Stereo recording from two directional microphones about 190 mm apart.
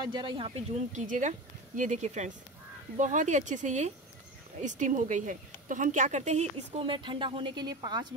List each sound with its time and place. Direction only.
0.0 s speech: 25° right (ahead or behind)
0.9 s a woman's voice: 40° right (ahead or behind); by 8.1 s 20° right (ahead or behind)